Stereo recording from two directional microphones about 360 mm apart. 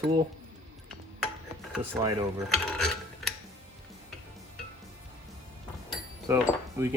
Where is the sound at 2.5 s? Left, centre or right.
Centre.